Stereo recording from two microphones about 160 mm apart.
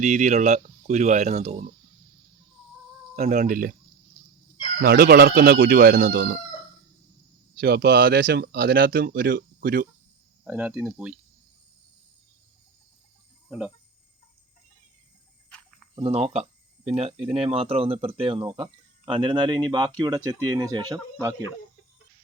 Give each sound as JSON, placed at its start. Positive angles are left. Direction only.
{"t": 0.0, "sound": "speech", "side_deg": -50}
{"t": 3.2, "sound": "speech", "side_deg": -50}
{"t": 4.8, "sound": "speech", "side_deg": -75}
{"t": 7.5, "sound": "speech", "side_deg": -85}
{"t": 10.4, "sound": "speech", "side_deg": -10}
{"t": 16.0, "sound": "speech", "side_deg": -35}